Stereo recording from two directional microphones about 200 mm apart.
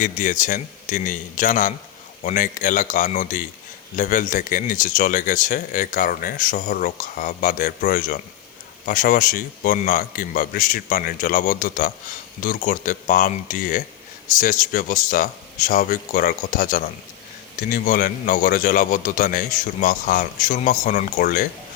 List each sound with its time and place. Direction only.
0.0 s a man's voice: 40° left (ahead or behind)